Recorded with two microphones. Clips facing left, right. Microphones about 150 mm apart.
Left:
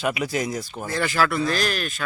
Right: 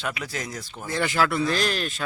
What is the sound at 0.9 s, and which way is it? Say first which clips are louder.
Speech: left 1 dB; 20° right (ahead or behind).